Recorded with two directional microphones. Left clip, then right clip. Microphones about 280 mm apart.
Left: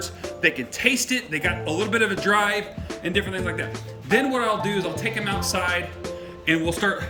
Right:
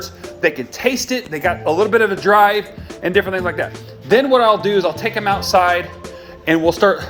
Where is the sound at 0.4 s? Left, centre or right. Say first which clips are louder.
Right 4 dB; centre.